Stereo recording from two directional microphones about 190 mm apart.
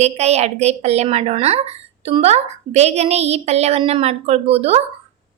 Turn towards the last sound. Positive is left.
turn(degrees=-30)  # may be behind; listen again after turning